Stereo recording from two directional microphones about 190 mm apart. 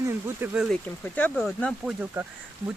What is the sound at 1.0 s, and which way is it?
Speech, 10° left (ahead or behind).